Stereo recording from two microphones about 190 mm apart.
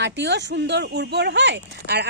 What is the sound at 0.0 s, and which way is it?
Speech, 65° right (ahead or behind).